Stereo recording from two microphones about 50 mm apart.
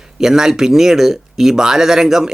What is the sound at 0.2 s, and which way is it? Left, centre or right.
Speech, centre.